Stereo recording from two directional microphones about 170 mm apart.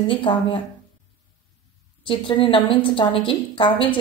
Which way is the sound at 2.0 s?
30° left (ahead or behind).